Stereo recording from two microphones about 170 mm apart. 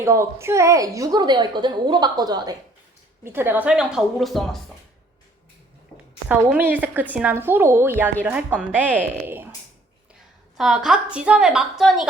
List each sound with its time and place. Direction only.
0.0 s speech: 15° right (ahead or behind)
3.2 s a woman's voice: 10° right (ahead or behind)
6.5 s a woman's voice: 10° right (ahead or behind)
10.6 s a woman's voice: centre (ahead or behind)